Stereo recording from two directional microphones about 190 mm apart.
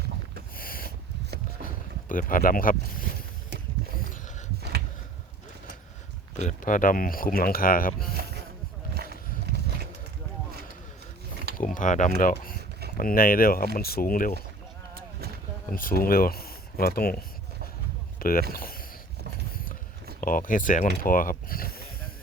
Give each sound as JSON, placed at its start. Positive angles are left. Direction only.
{"t": 0.5, "sound": "a sound", "side_deg": 50}
{"t": 6.3, "sound": "speech", "side_deg": 40}
{"t": 9.0, "sound": "a sound", "side_deg": -55}
{"t": 11.5, "sound": "speech", "side_deg": 45}
{"t": 15.7, "sound": "speech", "side_deg": 50}
{"t": 18.2, "sound": "speech", "side_deg": 50}
{"t": 20.2, "sound": "speech", "side_deg": 45}